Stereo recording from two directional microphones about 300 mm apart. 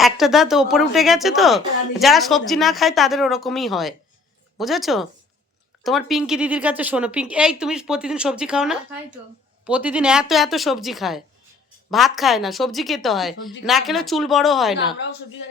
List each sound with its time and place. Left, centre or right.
0.0 s a woman's voice: centre